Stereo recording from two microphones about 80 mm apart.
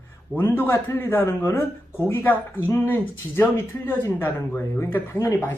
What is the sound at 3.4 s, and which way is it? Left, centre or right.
Speech, left.